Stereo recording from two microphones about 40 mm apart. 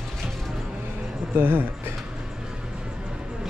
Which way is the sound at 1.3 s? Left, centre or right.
Right.